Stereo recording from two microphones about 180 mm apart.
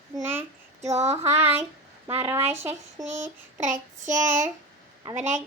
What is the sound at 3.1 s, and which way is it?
Child singing, 45° right (ahead or behind).